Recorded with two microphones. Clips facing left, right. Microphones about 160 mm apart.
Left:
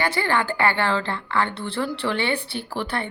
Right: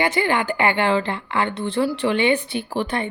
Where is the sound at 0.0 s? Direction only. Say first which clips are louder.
Right 3 dB; 20° right (ahead or behind).